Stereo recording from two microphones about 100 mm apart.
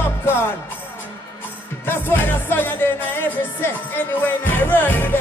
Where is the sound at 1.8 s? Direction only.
20° left (ahead or behind).